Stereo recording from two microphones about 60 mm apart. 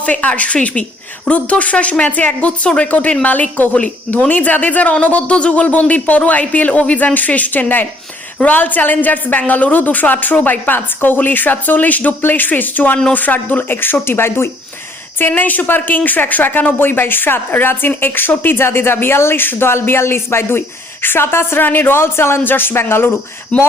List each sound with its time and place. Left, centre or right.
0.0 s speech: left
15.3 s speech: left
23.5 s speech: left